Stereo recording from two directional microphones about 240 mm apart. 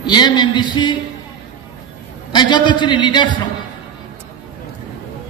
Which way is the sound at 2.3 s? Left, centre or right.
Centre.